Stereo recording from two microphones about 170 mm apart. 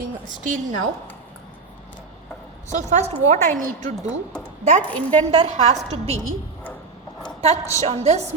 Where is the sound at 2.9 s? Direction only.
40° right (ahead or behind).